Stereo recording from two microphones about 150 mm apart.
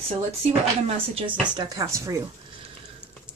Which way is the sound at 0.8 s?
40° right (ahead or behind).